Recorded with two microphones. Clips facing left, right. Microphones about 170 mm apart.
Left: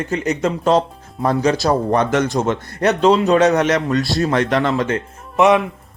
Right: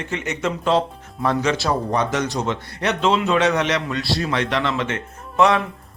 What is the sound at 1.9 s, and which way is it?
A man's voice, 55° left (ahead or behind).